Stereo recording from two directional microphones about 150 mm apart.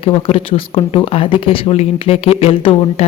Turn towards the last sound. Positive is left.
turn(degrees=40)  # may be behind; listen again after turning